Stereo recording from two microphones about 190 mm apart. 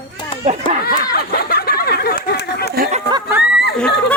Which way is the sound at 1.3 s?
55° left (ahead or behind).